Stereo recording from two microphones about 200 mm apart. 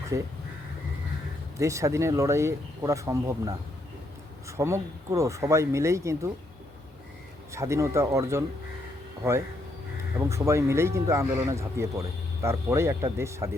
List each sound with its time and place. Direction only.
0.1 s speech: 15° right (ahead or behind)
1.5 s speech: 15° right (ahead or behind)
7.5 s speech: 15° right (ahead or behind)
10.2 s speech: 15° right (ahead or behind)